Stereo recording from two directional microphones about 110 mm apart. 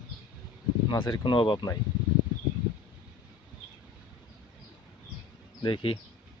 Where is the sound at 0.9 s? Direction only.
40° left (ahead or behind).